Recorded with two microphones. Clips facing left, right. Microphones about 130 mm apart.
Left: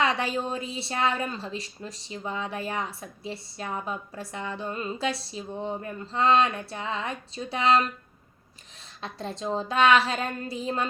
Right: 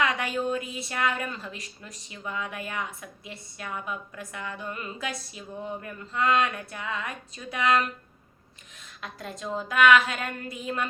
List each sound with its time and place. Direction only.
0.0 s a woman's voice: 30° left (ahead or behind)
9.0 s a woman's voice: 30° left (ahead or behind)